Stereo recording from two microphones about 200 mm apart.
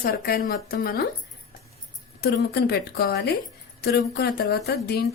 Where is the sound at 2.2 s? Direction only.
55° left (ahead or behind).